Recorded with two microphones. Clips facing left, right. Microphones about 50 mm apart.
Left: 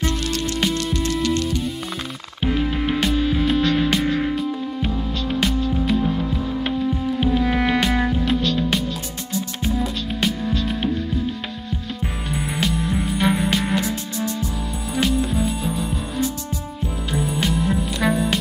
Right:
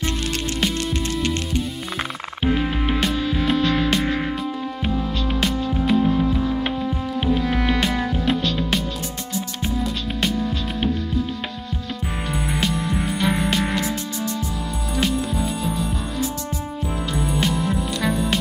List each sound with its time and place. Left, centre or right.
1.2 s music: right
2.4 s music: centre
7.4 s music: centre
12.3 s music: centre
15.0 s music: centre
17.1 s music: centre